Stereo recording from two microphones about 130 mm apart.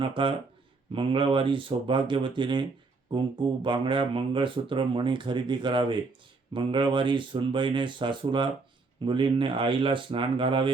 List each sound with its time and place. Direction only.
0.0 s speech: 40° right (ahead or behind)